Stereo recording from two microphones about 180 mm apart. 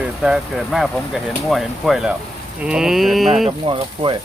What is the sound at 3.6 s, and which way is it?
Speech, 30° right (ahead or behind).